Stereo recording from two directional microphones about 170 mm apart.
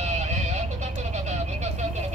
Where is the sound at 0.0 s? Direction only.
40° right (ahead or behind).